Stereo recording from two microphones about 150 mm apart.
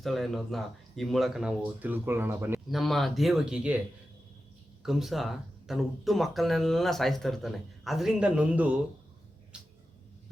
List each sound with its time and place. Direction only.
0.0 s speech: centre (ahead or behind); by 2.6 s 15° right (ahead or behind)
2.6 s speech: centre (ahead or behind)
4.8 s speech: centre (ahead or behind)